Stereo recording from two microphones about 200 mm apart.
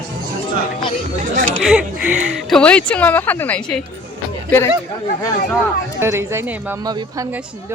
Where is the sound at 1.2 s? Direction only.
40° right (ahead or behind).